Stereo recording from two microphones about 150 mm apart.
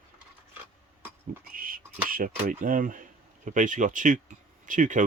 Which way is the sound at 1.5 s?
70° right (ahead or behind).